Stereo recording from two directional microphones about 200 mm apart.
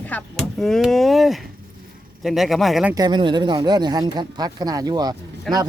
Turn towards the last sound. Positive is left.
turn(degrees=-20)  # may be behind; listen again after turning